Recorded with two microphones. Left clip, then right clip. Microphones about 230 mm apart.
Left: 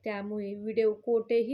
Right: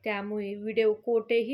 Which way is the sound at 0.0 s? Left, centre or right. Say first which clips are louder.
Right 3 dB; right.